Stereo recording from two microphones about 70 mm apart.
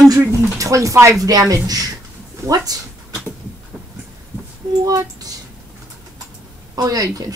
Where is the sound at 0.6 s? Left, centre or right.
Right.